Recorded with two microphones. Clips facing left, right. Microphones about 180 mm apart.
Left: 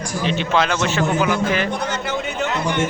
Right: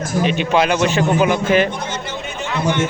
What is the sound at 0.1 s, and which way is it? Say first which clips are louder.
A man's voice: right 3 dB; 15° right (ahead or behind).